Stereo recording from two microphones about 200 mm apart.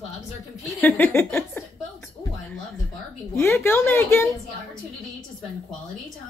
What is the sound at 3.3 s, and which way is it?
Speech, 10° left (ahead or behind).